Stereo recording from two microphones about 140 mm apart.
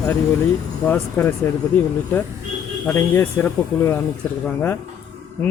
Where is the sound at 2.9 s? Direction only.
20° left (ahead or behind).